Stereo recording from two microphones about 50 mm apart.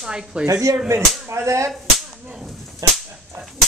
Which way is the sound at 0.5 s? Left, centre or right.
Right.